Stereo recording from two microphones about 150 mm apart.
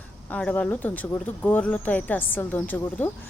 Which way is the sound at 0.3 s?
10° left (ahead or behind).